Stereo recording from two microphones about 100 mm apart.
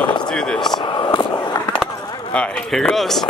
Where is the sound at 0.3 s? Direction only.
5° left (ahead or behind).